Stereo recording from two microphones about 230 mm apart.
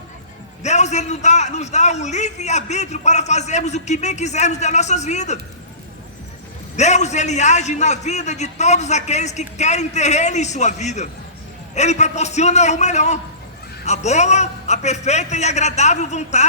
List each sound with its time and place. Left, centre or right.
0.6 s a man's voice: left
6.7 s a man's voice: left